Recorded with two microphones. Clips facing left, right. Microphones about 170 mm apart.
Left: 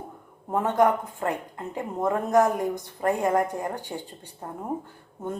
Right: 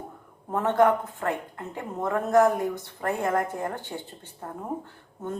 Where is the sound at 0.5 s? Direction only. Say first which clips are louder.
Even; 15° left (ahead or behind).